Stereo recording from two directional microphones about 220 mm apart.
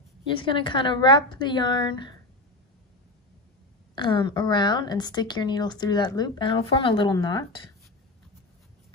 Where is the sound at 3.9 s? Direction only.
20° left (ahead or behind).